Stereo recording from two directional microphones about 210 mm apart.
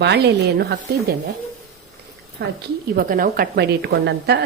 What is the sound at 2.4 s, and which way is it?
Speech, 50° right (ahead or behind).